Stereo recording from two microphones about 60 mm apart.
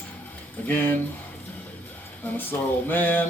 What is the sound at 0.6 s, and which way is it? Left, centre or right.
Speech, left.